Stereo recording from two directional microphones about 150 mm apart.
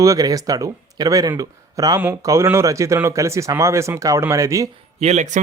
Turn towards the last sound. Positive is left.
turn(degrees=-50)  # may be behind; listen again after turning